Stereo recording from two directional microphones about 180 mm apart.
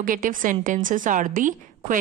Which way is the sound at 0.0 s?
50° right (ahead or behind).